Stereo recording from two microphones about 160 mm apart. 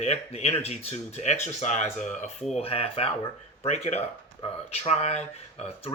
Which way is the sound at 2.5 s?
40° left (ahead or behind).